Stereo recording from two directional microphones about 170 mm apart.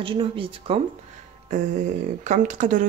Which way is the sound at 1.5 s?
45° right (ahead or behind).